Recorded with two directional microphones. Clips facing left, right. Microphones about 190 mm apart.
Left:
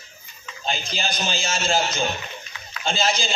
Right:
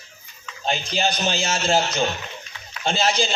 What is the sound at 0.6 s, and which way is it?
A man's voice, 70° right (ahead or behind).